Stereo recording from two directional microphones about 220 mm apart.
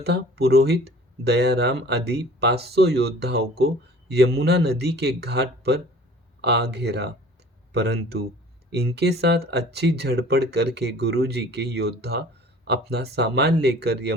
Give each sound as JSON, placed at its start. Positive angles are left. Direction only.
{"t": 0.0, "sound": "speech", "side_deg": -50}